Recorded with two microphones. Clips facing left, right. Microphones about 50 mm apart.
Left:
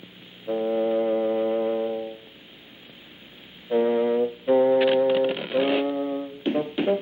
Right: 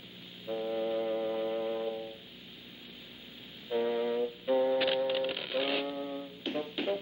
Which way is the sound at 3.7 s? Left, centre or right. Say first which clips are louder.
Left 9 dB; left.